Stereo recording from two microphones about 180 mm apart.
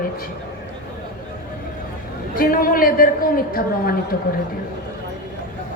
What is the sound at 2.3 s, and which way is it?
A woman's voice, 55° left (ahead or behind).